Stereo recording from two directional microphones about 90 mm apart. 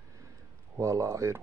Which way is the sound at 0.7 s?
35° right (ahead or behind).